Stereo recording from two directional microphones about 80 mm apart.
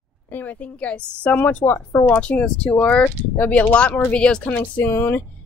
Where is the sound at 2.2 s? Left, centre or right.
Centre.